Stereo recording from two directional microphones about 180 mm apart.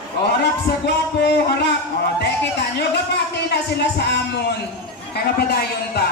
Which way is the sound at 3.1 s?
70° left (ahead or behind).